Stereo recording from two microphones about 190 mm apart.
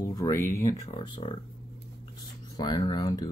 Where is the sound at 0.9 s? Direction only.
30° left (ahead or behind).